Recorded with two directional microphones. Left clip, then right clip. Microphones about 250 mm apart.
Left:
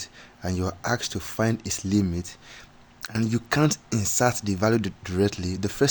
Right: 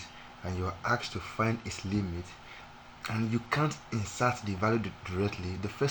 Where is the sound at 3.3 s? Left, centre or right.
Left.